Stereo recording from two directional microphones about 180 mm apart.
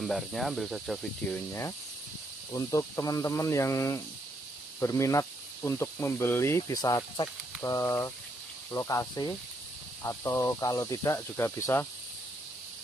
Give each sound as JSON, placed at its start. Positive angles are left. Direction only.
{"t": 0.0, "sound": "speech", "side_deg": 0}
{"t": 2.5, "sound": "speech", "side_deg": 20}